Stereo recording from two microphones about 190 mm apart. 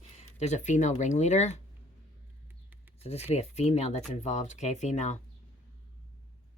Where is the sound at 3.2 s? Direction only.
35° left (ahead or behind).